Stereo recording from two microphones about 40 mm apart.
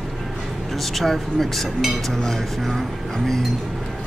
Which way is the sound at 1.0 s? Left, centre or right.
Centre.